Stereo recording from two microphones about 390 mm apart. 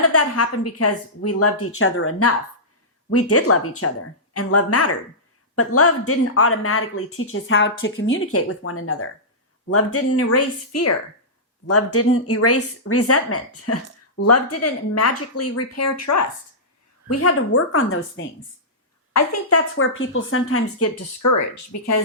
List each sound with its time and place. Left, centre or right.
0.0 s speech: left